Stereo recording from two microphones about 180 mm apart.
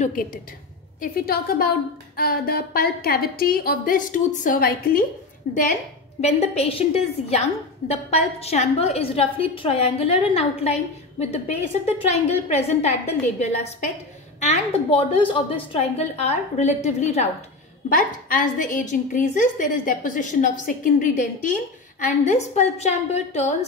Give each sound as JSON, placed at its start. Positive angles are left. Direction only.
{"t": 0.0, "sound": "a woman's voice", "side_deg": 50}
{"t": 6.2, "sound": "a woman's voice", "side_deg": 35}
{"t": 14.9, "sound": "a woman's voice", "side_deg": 30}
{"t": 17.8, "sound": "a woman's voice", "side_deg": 50}